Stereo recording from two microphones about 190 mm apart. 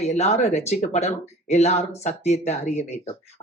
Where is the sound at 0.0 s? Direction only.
35° left (ahead or behind).